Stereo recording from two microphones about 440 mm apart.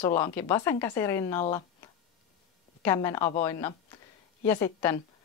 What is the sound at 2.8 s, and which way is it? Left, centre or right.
A woman's voice, centre.